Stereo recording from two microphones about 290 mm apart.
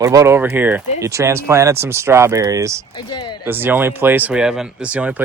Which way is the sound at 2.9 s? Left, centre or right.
Centre.